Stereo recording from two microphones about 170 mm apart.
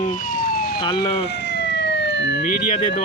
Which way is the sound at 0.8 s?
25° left (ahead or behind).